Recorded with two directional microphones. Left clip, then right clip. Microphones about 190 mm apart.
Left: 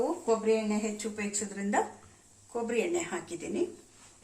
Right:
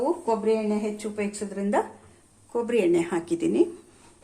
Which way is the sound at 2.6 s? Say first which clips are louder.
Right 8 dB; 60° right (ahead or behind).